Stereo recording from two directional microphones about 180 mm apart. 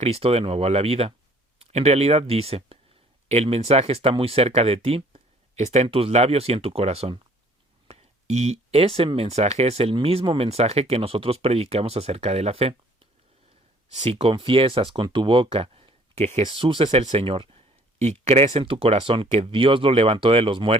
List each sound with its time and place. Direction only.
0.0 s speech: 35° right (ahead or behind)
13.9 s speech: 35° right (ahead or behind)